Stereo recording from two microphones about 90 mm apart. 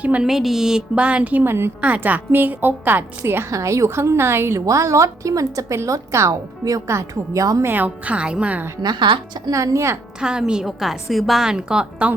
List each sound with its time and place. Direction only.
0.0 s a woman's voice: 15° right (ahead or behind)
0.3 s a woman's voice: 5° right (ahead or behind); by 3.4 s 25° right (ahead or behind)
3.5 s a woman's voice: 35° right (ahead or behind)
4.6 s a woman's voice: 40° right (ahead or behind)
7.6 s a woman's voice: 20° right (ahead or behind)
8.8 s a woman's voice: 55° right (ahead or behind)
9.5 s a woman's voice: 35° right (ahead or behind)
10.2 s a woman's voice: 10° right (ahead or behind)